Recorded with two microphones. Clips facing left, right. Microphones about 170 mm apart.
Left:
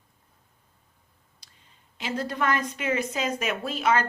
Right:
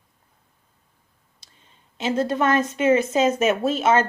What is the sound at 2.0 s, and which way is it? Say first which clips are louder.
Speech: right 7 dB; 25° right (ahead or behind).